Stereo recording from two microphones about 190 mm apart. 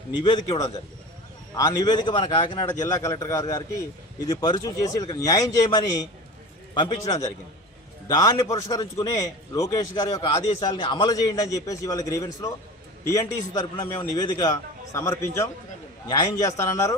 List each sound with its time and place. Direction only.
0.2 s a man's voice: 25° left (ahead or behind)
6.7 s a man's voice: 20° left (ahead or behind)
13.5 s a man's voice: 20° left (ahead or behind)